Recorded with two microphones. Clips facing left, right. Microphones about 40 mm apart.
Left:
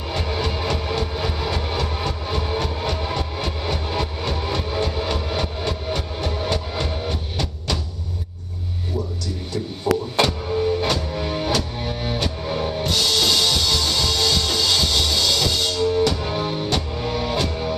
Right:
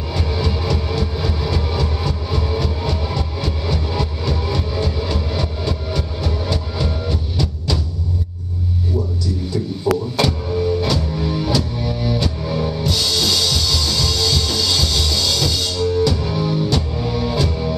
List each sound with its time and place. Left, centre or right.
0.1 s train: left
10.1 s music: left
16.3 s music: left